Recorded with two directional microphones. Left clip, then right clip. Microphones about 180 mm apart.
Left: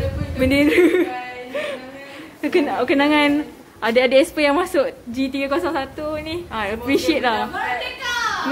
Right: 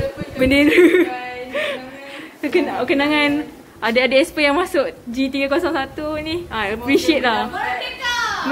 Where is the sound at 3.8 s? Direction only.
15° left (ahead or behind).